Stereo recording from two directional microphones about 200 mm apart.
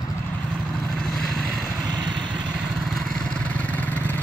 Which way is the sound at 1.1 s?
Centre (ahead or behind).